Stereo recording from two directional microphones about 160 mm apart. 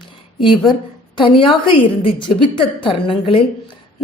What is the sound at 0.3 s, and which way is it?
A woman's voice, 30° left (ahead or behind).